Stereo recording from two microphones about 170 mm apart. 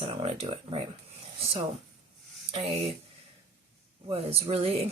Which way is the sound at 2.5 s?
35° right (ahead or behind).